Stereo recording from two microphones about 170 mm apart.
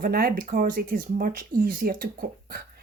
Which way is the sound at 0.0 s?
60° right (ahead or behind).